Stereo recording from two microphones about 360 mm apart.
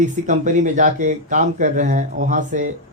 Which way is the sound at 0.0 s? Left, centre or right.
Right.